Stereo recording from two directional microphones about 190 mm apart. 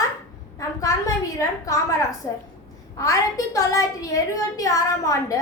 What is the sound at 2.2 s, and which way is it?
Speech, 20° left (ahead or behind).